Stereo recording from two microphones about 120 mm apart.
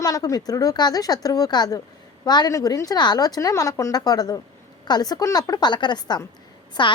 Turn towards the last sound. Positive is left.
turn(degrees=40)  # may be behind; listen again after turning